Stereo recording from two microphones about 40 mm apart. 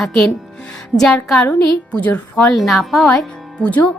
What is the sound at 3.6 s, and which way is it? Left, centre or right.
Speech, left.